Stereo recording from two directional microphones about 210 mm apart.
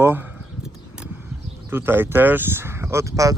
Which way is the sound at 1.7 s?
10° right (ahead or behind).